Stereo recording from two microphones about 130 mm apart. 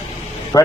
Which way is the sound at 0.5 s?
25° left (ahead or behind).